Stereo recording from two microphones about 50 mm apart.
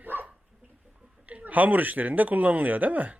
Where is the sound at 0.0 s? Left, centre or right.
Right.